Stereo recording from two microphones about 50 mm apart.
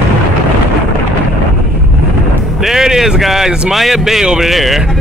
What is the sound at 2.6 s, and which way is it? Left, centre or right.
A man's voice, centre.